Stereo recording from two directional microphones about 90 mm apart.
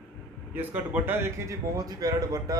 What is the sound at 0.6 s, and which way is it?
Speech, 20° right (ahead or behind).